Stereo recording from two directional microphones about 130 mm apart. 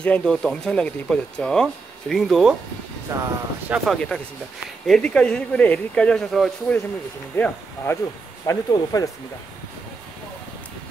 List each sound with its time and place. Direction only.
0.0 s speech: 5° left (ahead or behind)
3.1 s speech: 20° right (ahead or behind)
3.8 s speech: centre (ahead or behind)
7.3 s speech: 15° left (ahead or behind)
8.5 s speech: 25° left (ahead or behind)